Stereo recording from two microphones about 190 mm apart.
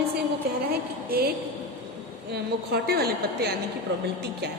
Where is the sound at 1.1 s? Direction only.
55° right (ahead or behind).